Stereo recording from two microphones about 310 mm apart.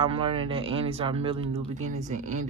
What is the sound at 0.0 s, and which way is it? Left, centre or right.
Speech, centre.